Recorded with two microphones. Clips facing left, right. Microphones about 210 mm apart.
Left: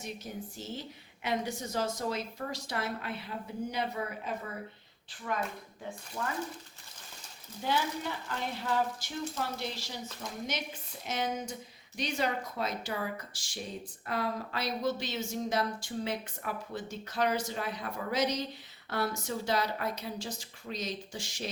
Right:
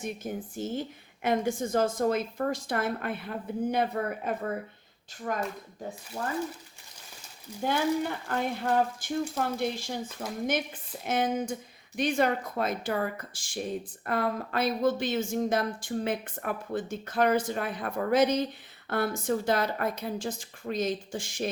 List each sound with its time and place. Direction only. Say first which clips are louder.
0.0 s a woman's voice: right 6 dB; 50° right (ahead or behind)
5.2 s a woman's voice: right 3 dB; 40° right (ahead or behind)
7.6 s a woman's voice: right 6 dB; 50° right (ahead or behind)